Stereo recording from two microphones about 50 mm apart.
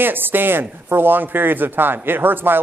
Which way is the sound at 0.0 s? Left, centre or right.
Right.